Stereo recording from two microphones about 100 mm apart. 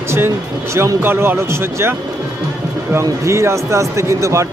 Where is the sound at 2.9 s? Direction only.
30° right (ahead or behind).